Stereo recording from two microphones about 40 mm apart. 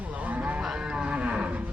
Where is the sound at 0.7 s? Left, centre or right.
Right.